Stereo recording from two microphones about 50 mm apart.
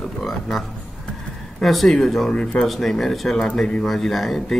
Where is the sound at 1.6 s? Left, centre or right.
Centre.